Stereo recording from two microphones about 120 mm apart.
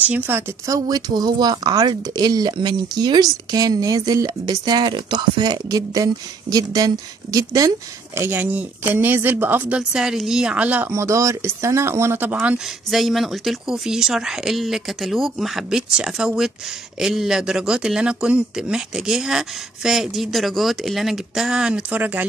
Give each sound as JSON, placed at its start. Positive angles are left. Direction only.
{"t": 0.0, "sound": "speech", "side_deg": -15}
{"t": 10.9, "sound": "speech", "side_deg": -25}